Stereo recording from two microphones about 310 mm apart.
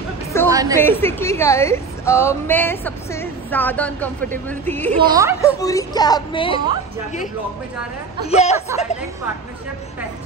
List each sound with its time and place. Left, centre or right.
0.5 s a sound: centre
0.7 s a woman's voice: centre
4.9 s a woman's voice: centre
5.4 s a woman's voice: centre
8.3 s speech: left